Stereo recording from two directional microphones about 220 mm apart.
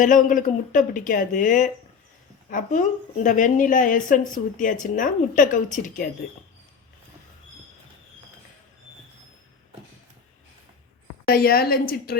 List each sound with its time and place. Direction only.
0.0 s a woman's voice: 35° left (ahead or behind)
11.3 s a woman's voice: 45° left (ahead or behind)